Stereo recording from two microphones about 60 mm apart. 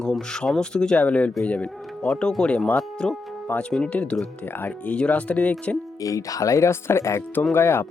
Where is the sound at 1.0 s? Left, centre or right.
Left.